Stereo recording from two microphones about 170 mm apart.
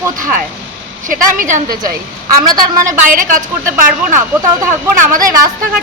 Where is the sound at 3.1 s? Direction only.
55° right (ahead or behind).